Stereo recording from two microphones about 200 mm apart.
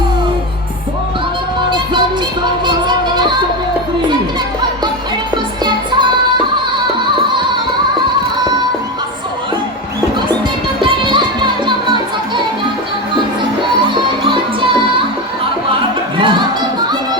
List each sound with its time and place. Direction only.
2.4 s music: 20° right (ahead or behind)
5.6 s music: 20° right (ahead or behind)
10.8 s music: 25° right (ahead or behind)
13.6 s music: 25° right (ahead or behind)
16.1 s music: 25° right (ahead or behind)